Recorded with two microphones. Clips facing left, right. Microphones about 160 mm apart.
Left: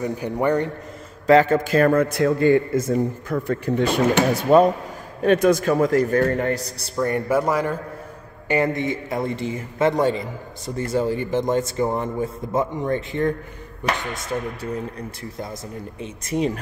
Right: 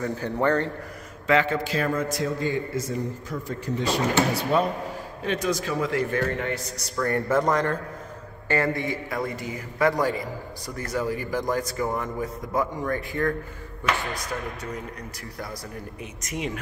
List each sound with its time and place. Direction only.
0.0 s a man's voice: 15° left (ahead or behind)
1.2 s a man's voice: 40° left (ahead or behind)
7.0 s a man's voice: 15° left (ahead or behind); by 16.5 s 35° left (ahead or behind)